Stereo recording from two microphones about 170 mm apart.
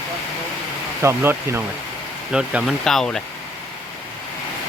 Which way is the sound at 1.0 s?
15° right (ahead or behind).